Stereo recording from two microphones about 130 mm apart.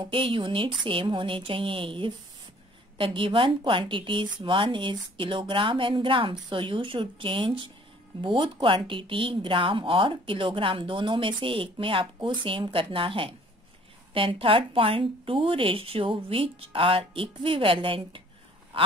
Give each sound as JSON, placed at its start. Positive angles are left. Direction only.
{"t": 0.0, "sound": "a woman's voice", "side_deg": -40}